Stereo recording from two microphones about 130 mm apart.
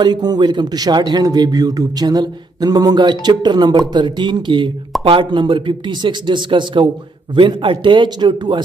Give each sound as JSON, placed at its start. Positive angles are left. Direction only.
{"t": 0.0, "sound": "a man's voice", "side_deg": -30}